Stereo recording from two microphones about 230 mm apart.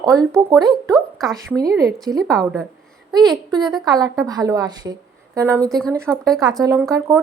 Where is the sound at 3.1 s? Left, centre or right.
Centre.